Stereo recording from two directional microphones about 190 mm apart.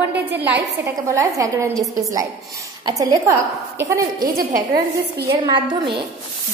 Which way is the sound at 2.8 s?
20° right (ahead or behind).